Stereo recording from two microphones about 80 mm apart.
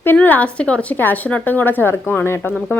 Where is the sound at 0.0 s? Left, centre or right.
Left.